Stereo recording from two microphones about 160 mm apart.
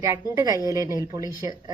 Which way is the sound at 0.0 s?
20° right (ahead or behind).